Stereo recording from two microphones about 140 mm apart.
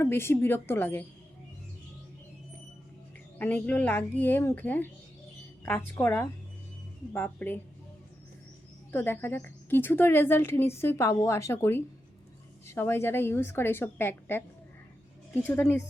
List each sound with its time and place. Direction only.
0.0 s a woman's voice: 15° left (ahead or behind)
3.3 s a woman's voice: 10° left (ahead or behind)
8.9 s a woman's voice: 15° left (ahead or behind)
15.4 s a woman's voice: 15° left (ahead or behind)